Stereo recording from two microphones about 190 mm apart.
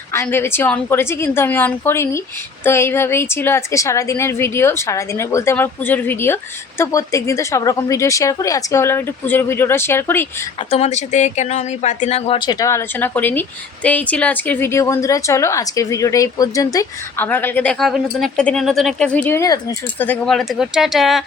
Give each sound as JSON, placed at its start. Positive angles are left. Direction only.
{"t": 0.1, "sound": "a woman's voice", "side_deg": 15}
{"t": 10.6, "sound": "a woman's voice", "side_deg": 30}
{"t": 20.1, "sound": "speech", "side_deg": 0}